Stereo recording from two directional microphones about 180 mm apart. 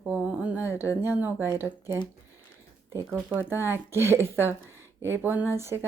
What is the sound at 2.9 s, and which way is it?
Speech, 15° right (ahead or behind).